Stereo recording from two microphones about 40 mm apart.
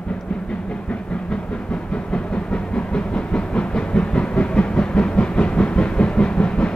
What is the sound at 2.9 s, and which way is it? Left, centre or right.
Train, left.